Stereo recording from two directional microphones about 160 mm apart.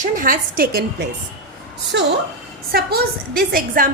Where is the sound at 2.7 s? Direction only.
75° right (ahead or behind).